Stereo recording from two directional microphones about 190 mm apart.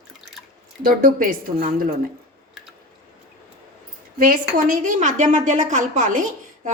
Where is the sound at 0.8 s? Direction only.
45° right (ahead or behind).